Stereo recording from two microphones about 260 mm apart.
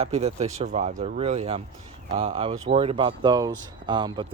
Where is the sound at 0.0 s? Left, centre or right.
Right.